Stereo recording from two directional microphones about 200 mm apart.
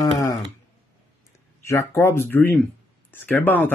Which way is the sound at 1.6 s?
15° left (ahead or behind).